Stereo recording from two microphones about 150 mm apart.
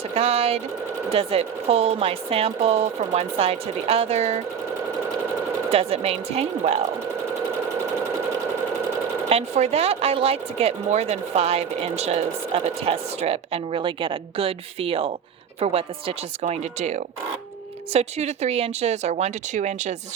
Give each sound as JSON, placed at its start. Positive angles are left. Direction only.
{"t": 0.1, "sound": "speech", "side_deg": -45}
{"t": 5.7, "sound": "speech", "side_deg": -40}
{"t": 9.3, "sound": "speech", "side_deg": -45}